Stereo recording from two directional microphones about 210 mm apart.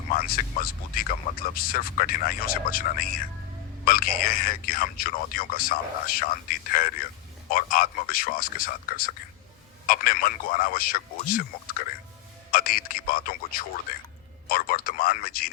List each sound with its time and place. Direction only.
0.1 s speech: 40° left (ahead or behind)
12.5 s speech: 45° left (ahead or behind)